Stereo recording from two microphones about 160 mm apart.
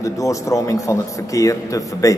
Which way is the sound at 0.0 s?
20° left (ahead or behind).